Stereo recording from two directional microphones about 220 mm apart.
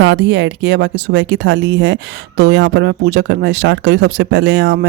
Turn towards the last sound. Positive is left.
turn(degrees=-55)  # may be behind; listen again after turning